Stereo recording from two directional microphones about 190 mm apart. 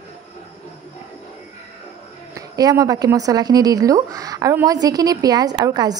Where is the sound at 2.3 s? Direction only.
20° right (ahead or behind).